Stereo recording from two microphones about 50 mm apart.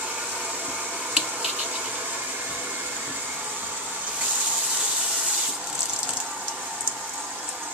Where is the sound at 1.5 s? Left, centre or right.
Right.